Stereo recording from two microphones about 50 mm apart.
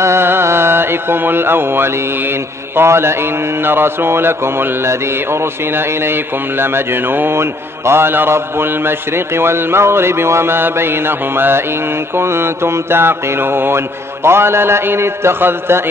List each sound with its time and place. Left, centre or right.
0.0 s mantra: right
2.7 s a man's voice: right
3.6 s mantra: right
6.6 s mantra: right
12.2 s mantra: right
14.2 s a man's voice: right